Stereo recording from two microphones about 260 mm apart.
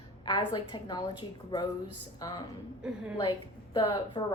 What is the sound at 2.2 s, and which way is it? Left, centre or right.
A woman's voice, centre.